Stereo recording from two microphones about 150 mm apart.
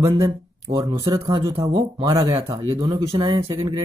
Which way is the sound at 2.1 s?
25° right (ahead or behind).